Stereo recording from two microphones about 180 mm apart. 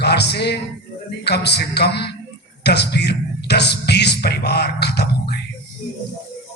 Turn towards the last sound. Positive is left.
turn(degrees=65)  # may be behind; listen again after turning